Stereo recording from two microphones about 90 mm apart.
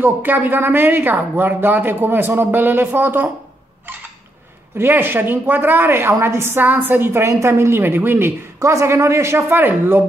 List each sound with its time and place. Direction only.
0.0 s a woman's voice: 20° right (ahead or behind)
4.7 s a woman's voice: 25° right (ahead or behind)
8.5 s a woman's voice: 35° right (ahead or behind)